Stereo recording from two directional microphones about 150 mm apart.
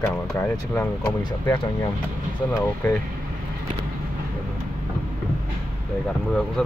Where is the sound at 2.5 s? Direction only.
20° left (ahead or behind).